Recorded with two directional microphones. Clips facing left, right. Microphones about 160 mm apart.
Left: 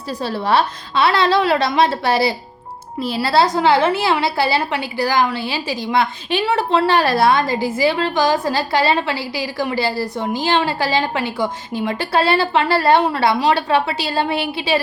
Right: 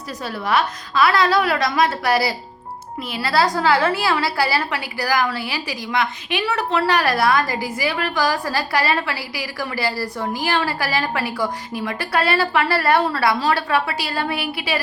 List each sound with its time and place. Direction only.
0.1 s a woman's voice: 30° left (ahead or behind)